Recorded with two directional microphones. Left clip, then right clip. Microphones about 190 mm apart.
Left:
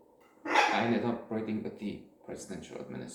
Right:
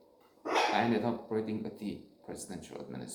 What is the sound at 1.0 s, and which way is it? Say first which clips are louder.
Speech: even; 30° right (ahead or behind).